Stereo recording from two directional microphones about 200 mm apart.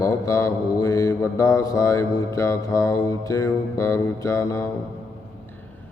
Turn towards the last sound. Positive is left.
turn(degrees=15)  # may be behind; listen again after turning